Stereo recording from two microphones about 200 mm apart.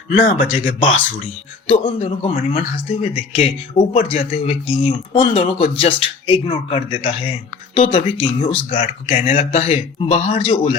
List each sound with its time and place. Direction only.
0.1 s speech: 40° left (ahead or behind)
1.6 s speech: 30° left (ahead or behind)